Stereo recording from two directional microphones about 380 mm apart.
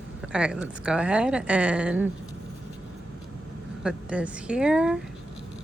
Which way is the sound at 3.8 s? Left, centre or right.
Centre.